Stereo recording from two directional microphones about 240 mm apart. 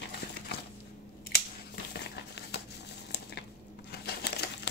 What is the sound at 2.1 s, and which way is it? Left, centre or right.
Crumpling, left.